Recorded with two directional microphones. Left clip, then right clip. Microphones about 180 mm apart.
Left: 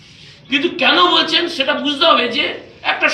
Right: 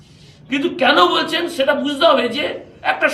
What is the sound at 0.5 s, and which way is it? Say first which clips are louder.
Speech: left 1 dB; 35° right (ahead or behind).